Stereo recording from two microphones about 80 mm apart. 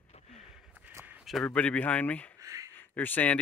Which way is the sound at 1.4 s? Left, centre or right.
Centre.